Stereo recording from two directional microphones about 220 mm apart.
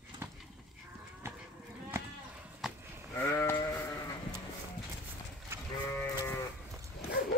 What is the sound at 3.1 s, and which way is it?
Sheep, 10° left (ahead or behind).